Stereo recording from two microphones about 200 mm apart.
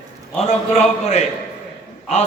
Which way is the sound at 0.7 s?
35° left (ahead or behind).